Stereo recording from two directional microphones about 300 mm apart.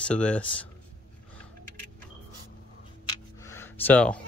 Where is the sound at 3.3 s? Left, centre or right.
Centre.